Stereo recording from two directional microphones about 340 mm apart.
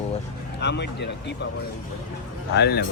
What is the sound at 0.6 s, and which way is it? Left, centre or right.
Speech, left.